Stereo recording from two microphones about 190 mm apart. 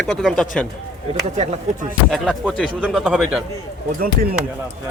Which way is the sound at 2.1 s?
Centre (ahead or behind).